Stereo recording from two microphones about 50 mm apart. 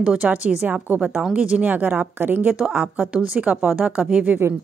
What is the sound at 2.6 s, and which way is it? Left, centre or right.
A woman's voice, centre.